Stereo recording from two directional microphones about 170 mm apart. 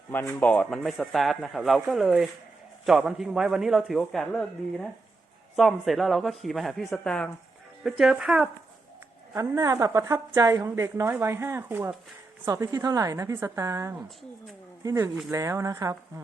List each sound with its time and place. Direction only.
0.1 s speech: 10° left (ahead or behind); by 8.4 s 5° right (ahead or behind)
9.3 s a woman's voice: 20° right (ahead or behind)